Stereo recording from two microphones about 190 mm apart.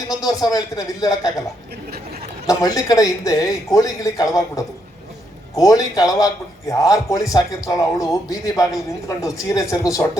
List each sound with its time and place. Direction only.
0.1 s speech: 20° left (ahead or behind)
2.5 s a man's voice: 20° left (ahead or behind)